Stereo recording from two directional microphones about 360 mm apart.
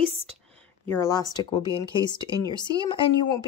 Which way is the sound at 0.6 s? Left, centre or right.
Centre.